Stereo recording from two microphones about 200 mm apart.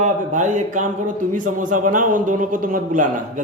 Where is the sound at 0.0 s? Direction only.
40° right (ahead or behind).